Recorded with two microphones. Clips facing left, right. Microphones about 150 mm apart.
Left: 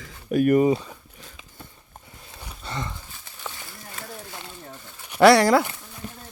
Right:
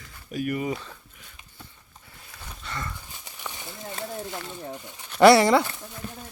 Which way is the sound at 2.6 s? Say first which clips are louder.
Left 3 dB; 25° left (ahead or behind).